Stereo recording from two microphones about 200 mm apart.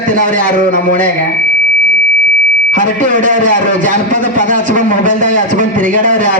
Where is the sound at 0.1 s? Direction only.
40° right (ahead or behind).